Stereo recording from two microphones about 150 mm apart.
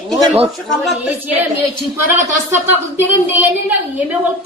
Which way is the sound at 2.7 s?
15° right (ahead or behind).